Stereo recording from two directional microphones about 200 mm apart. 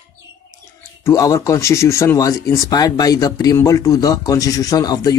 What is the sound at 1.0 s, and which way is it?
Speech, 15° left (ahead or behind).